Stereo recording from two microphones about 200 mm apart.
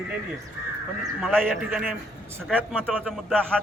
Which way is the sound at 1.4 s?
5° right (ahead or behind).